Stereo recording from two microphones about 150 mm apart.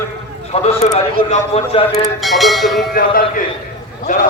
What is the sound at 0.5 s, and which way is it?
Speech, 40° left (ahead or behind).